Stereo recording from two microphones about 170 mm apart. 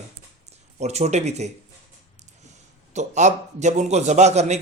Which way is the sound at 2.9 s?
45° right (ahead or behind).